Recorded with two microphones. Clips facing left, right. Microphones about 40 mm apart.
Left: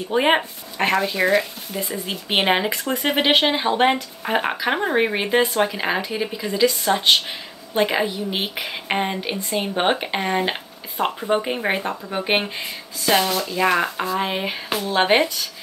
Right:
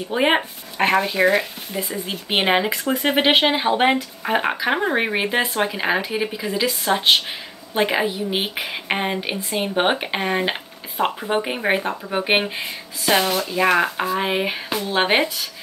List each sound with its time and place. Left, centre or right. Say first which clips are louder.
0.1 s speech: left 1 dB; centre
1.9 s speech: left 1 dB; centre